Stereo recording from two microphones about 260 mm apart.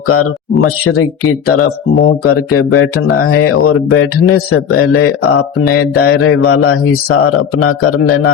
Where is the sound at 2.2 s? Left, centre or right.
Left.